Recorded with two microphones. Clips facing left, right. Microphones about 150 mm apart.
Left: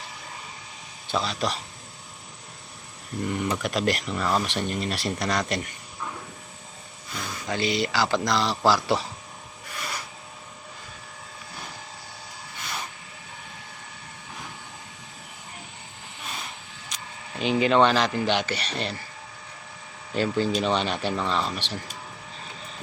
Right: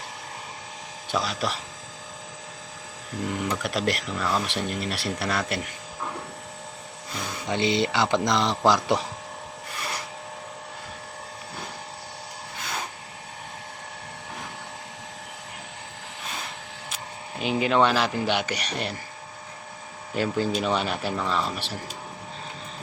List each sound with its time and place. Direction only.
1.1 s speech: 10° right (ahead or behind)
3.2 s speech: centre (ahead or behind)
7.5 s speech: 25° right (ahead or behind)
17.4 s speech: 5° right (ahead or behind)
20.1 s speech: 10° right (ahead or behind)